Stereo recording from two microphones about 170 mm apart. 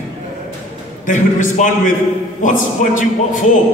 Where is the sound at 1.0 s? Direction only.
45° left (ahead or behind).